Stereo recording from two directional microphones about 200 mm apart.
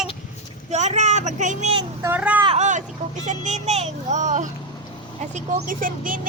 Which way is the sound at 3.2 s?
35° right (ahead or behind).